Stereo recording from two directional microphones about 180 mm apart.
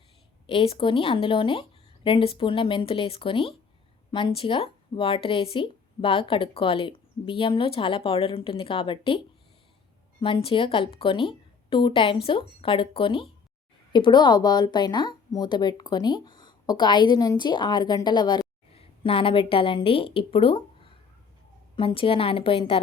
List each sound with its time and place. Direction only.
0.4 s a woman's voice: 30° left (ahead or behind)